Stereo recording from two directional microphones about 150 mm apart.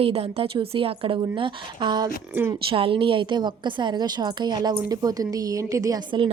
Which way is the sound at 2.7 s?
35° right (ahead or behind).